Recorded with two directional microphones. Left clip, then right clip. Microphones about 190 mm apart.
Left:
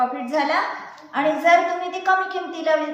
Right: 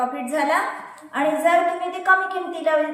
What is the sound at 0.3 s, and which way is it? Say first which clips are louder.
A woman's voice: even; 20° right (ahead or behind).